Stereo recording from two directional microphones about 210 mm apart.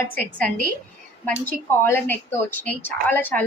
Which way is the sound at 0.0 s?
5° left (ahead or behind).